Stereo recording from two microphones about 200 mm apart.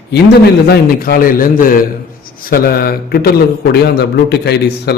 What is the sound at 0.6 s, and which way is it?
A man's voice, 50° left (ahead or behind).